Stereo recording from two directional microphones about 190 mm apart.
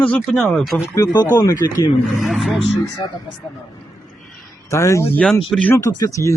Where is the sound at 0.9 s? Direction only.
20° left (ahead or behind).